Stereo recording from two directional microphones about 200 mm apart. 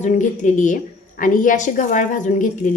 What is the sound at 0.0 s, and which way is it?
A woman's voice, 40° left (ahead or behind).